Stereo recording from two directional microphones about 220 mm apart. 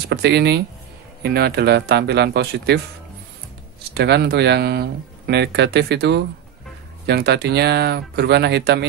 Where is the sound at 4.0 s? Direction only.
50° right (ahead or behind).